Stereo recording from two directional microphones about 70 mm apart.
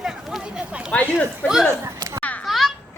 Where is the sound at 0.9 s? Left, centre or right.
Left.